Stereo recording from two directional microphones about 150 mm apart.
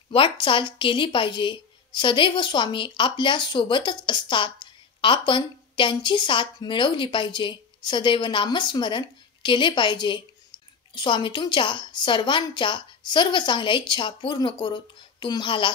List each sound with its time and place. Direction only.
0.1 s speech: 35° left (ahead or behind)